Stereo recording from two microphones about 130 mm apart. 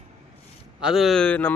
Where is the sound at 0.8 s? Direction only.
5° right (ahead or behind); by 1.5 s 15° left (ahead or behind).